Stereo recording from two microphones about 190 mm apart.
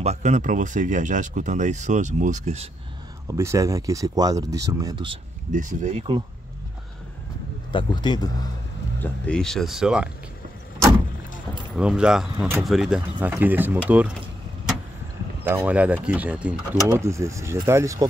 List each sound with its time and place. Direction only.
0.0 s speech: 35° right (ahead or behind)
3.3 s speech: 15° right (ahead or behind)
5.5 s speech: 45° right (ahead or behind)
7.7 s a man's voice: 25° left (ahead or behind)
9.0 s speech: 5° left (ahead or behind)
11.7 s speech: 5° right (ahead or behind)
15.4 s speech: 10° right (ahead or behind)